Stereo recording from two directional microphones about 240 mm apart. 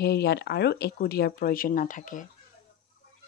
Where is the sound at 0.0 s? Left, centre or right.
Left.